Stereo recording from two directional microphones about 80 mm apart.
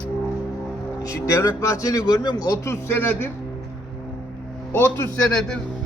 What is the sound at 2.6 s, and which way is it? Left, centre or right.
Speech, left.